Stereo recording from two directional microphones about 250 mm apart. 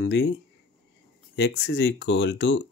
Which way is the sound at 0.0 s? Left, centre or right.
Left.